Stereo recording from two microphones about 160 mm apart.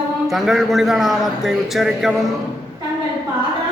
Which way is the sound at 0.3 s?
Centre (ahead or behind).